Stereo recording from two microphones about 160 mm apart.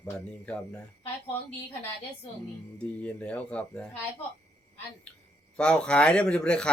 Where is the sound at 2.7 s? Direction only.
10° left (ahead or behind).